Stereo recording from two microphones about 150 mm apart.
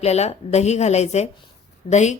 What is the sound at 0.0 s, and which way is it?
Speech, 45° left (ahead or behind).